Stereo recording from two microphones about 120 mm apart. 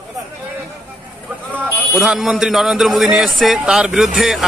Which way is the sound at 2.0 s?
5° right (ahead or behind).